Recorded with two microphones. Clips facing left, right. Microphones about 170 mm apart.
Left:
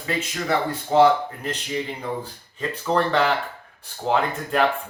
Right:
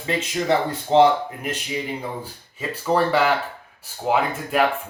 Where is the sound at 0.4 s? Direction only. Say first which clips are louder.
Right 2 dB; 20° right (ahead or behind).